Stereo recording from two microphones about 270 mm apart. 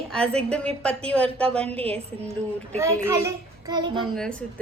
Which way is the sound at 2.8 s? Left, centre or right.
Centre.